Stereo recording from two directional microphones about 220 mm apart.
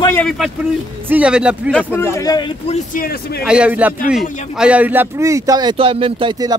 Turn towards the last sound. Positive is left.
turn(degrees=-20)  # may be behind; listen again after turning